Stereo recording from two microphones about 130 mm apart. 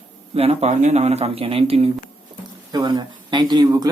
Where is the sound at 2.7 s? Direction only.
30° right (ahead or behind).